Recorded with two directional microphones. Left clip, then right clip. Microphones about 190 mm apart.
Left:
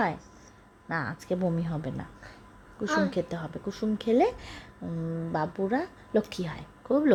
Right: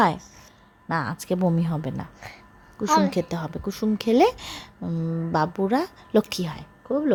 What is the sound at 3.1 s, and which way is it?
A woman's voice, 20° right (ahead or behind).